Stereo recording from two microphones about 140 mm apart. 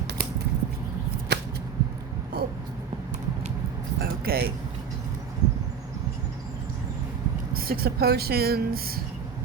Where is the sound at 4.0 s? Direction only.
90° right.